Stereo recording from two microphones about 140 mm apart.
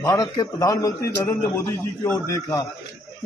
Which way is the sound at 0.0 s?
25° left (ahead or behind).